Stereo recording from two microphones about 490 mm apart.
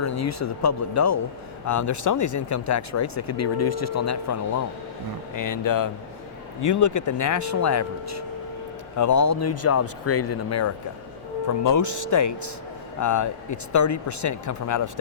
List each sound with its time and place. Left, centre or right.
0.0 s speech: left